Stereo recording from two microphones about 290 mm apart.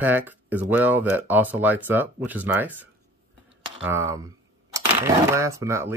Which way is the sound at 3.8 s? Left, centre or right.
Centre.